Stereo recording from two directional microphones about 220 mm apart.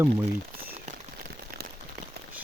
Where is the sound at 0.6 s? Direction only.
40° right (ahead or behind).